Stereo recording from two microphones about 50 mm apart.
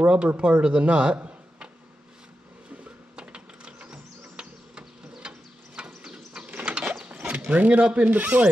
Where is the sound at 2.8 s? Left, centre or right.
Right.